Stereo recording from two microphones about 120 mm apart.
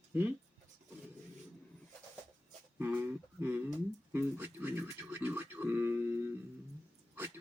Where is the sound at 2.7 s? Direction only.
15° right (ahead or behind).